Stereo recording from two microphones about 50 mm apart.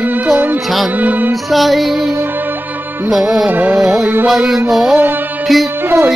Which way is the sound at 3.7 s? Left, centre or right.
Centre.